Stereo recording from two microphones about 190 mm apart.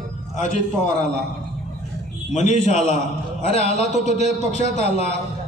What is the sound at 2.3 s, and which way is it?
A man's voice, 40° left (ahead or behind).